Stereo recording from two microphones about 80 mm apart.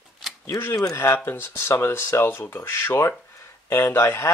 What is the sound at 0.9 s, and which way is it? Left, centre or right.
Speech, left.